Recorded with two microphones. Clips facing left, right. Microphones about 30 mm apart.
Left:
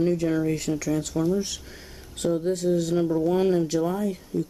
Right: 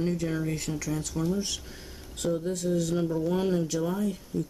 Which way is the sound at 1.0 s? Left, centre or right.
Centre.